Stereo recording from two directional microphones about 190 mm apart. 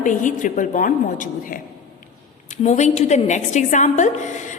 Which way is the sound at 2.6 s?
35° left (ahead or behind).